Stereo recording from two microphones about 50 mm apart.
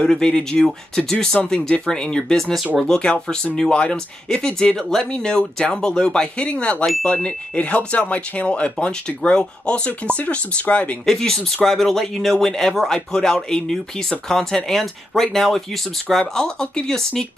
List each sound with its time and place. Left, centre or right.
0.0 s speech: centre
6.4 s speech: left
10.1 s speech: left
11.1 s speech: centre